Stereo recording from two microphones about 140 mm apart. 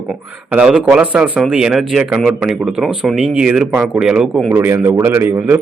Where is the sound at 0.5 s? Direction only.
10° right (ahead or behind).